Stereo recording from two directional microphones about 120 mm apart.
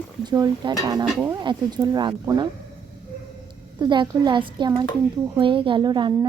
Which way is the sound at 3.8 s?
40° right (ahead or behind).